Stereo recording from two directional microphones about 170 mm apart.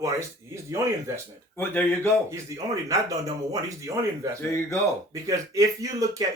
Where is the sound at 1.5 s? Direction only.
10° left (ahead or behind).